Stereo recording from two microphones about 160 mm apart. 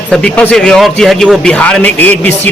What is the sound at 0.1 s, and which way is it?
A man's voice, 5° left (ahead or behind).